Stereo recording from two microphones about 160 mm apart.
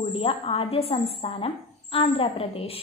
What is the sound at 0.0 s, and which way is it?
A woman's voice, 35° left (ahead or behind).